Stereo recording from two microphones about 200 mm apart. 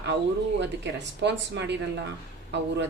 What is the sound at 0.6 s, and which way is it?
A woman's voice, 60° right (ahead or behind).